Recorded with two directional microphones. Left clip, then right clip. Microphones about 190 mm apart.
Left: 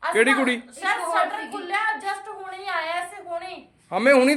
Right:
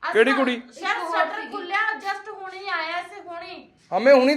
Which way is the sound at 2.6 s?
10° left (ahead or behind).